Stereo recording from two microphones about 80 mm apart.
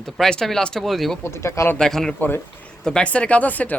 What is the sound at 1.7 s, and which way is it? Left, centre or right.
Speech, centre.